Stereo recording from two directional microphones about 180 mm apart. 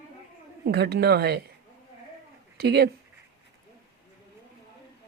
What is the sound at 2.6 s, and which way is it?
Speech, 65° right (ahead or behind).